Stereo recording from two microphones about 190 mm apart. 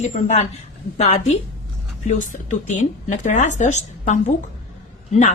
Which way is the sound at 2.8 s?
40° left (ahead or behind).